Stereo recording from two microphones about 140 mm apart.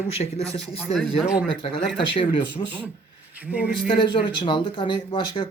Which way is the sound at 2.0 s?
35° left (ahead or behind).